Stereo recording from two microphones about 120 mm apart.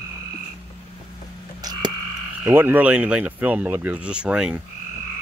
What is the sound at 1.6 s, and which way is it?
Frog, 35° right (ahead or behind).